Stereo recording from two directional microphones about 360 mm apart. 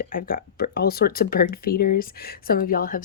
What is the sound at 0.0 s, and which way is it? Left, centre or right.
Speech, left.